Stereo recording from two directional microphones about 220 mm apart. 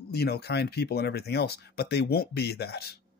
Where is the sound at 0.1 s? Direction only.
45° left (ahead or behind).